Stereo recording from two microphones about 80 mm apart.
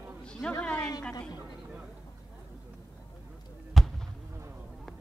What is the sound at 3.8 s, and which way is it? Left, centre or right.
Basketball bounce, centre.